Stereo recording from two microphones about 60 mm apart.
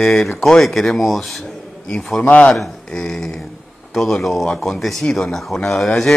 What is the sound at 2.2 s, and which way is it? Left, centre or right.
Speech, left.